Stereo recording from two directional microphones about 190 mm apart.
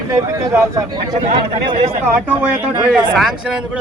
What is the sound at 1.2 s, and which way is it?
Speech, 35° right (ahead or behind).